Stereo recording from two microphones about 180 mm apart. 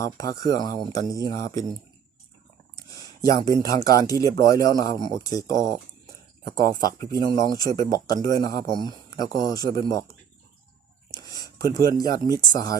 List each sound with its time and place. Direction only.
0.0 s speech: 20° left (ahead or behind)
2.7 s a sound: 20° left (ahead or behind)
4.2 s speech: 20° left (ahead or behind)